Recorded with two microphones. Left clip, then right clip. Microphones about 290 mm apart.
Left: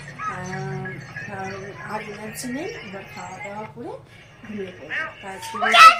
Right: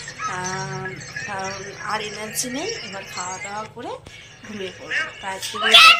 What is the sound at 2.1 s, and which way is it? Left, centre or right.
A woman's voice, centre.